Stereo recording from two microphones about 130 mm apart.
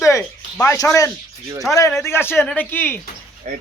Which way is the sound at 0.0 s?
20° left (ahead or behind).